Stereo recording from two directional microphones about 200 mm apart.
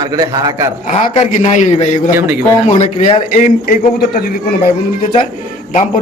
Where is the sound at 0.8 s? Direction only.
35° left (ahead or behind).